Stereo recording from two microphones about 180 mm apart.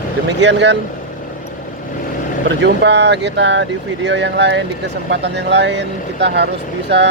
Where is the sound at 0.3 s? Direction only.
75° right (ahead or behind).